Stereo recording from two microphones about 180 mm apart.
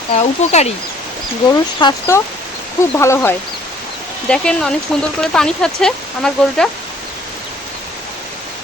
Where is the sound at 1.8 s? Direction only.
20° left (ahead or behind); by 6.7 s 5° left (ahead or behind).